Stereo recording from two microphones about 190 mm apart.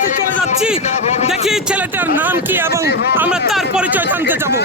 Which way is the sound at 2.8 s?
60° left (ahead or behind).